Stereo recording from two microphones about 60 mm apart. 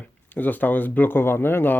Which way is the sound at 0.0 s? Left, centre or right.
Left.